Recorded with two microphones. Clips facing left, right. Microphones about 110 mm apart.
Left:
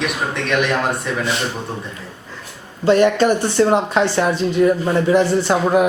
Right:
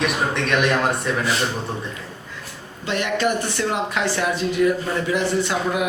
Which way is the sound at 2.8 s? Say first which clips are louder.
Left 9 dB; 35° left (ahead or behind).